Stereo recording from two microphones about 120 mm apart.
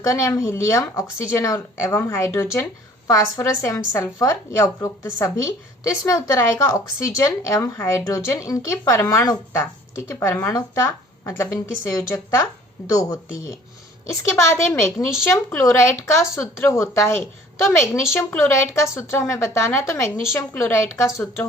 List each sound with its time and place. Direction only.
0.0 s speech: 30° left (ahead or behind)